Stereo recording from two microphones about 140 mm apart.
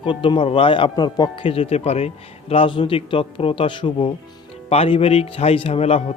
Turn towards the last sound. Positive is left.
turn(degrees=45)  # may be behind; listen again after turning